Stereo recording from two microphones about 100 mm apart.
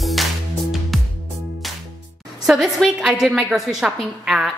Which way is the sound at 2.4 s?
5° right (ahead or behind).